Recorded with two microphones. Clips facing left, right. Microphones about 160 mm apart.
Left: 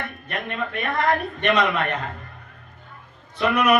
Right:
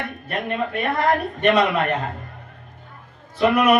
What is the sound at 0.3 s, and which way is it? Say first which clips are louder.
A man's voice: right 5 dB; 35° right (ahead or behind).